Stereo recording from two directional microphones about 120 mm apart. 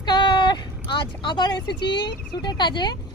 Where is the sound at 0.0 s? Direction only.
40° left (ahead or behind).